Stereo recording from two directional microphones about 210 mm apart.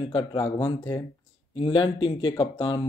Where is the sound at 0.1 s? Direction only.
20° left (ahead or behind).